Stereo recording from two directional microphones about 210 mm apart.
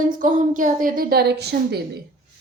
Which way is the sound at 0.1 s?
40° right (ahead or behind).